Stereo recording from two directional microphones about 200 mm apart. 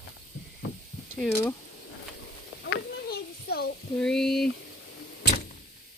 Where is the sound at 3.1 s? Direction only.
50° left (ahead or behind).